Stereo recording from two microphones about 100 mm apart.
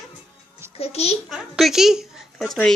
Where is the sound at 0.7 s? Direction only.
90° left.